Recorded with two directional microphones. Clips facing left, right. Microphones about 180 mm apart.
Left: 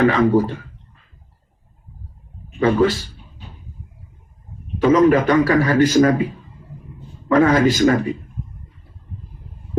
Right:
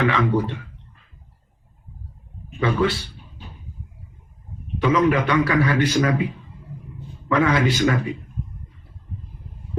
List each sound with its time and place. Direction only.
0.0 s a man's voice: 40° left (ahead or behind)
2.6 s a man's voice: 40° left (ahead or behind)
4.8 s a man's voice: 45° left (ahead or behind)